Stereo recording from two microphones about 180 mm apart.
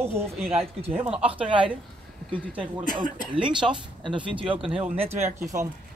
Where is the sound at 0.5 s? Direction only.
35° right (ahead or behind).